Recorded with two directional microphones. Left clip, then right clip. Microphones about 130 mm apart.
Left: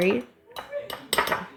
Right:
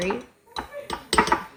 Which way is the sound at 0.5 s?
5° left (ahead or behind).